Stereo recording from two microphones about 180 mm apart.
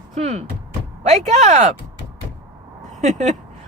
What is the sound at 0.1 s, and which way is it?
Speech, 40° right (ahead or behind).